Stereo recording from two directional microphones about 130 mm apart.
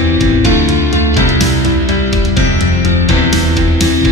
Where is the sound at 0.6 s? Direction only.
25° right (ahead or behind).